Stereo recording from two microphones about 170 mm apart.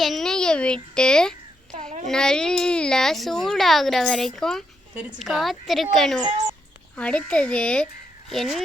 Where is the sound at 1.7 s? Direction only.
45° right (ahead or behind).